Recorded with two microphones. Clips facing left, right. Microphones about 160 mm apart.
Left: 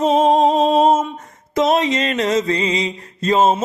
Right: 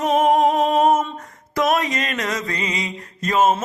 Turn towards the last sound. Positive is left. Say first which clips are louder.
# left 3 dB
turn(degrees=25)  # may be behind; listen again after turning